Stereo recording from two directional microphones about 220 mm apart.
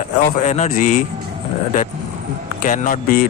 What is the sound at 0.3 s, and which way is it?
Speech, 30° left (ahead or behind).